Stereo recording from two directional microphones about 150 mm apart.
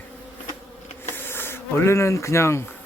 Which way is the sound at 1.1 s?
15° left (ahead or behind).